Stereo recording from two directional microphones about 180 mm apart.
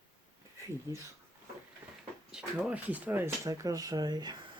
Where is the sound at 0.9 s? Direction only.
20° right (ahead or behind).